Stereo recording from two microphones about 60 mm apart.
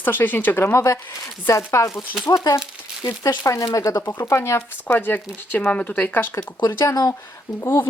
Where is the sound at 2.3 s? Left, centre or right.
Left.